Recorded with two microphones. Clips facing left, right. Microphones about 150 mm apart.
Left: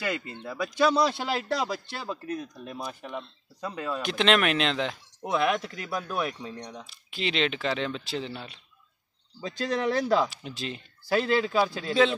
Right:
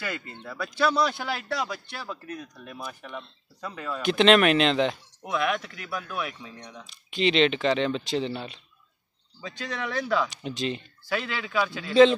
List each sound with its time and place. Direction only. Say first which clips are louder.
0.0 s a man's voice: left 3 dB; 20° left (ahead or behind)
4.0 s speech: right 5 dB; centre (ahead or behind)
5.2 s speech: left 2 dB; 30° left (ahead or behind)
6.9 s speech: right 8 dB; 5° left (ahead or behind)
9.4 s speech: left 5 dB; 35° left (ahead or behind)
10.3 s speech: right 6 dB; centre (ahead or behind)
11.1 s speech: left 7 dB; 35° left (ahead or behind)